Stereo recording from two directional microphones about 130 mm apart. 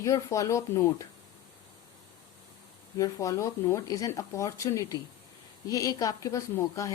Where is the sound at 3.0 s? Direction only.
25° left (ahead or behind).